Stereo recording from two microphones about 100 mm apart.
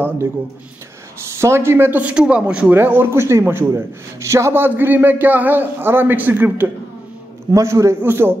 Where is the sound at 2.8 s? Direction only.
20° right (ahead or behind).